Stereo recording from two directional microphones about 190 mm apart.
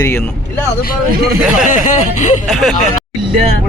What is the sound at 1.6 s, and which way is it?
Speech, 45° left (ahead or behind).